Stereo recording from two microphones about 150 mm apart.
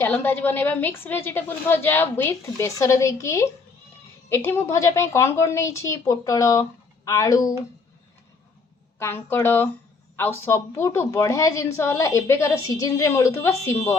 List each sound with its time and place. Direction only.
0.0 s a woman's voice: 15° left (ahead or behind)
9.0 s a woman's voice: 15° left (ahead or behind)